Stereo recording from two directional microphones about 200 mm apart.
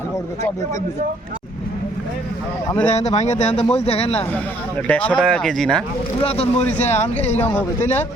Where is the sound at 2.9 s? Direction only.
35° left (ahead or behind).